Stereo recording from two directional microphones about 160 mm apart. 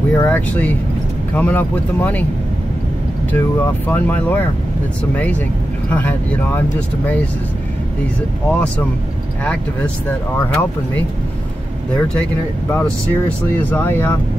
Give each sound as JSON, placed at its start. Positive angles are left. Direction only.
{"t": 0.1, "sound": "speech", "side_deg": 10}
{"t": 3.3, "sound": "speech", "side_deg": 10}
{"t": 8.5, "sound": "speech", "side_deg": 10}
{"t": 10.0, "sound": "speech", "side_deg": 10}
{"t": 12.7, "sound": "speech", "side_deg": 10}